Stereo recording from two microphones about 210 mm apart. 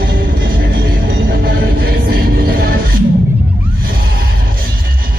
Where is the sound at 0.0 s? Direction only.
45° right (ahead or behind).